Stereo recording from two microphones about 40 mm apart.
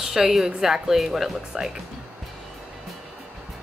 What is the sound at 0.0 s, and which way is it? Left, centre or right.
A woman's voice, centre.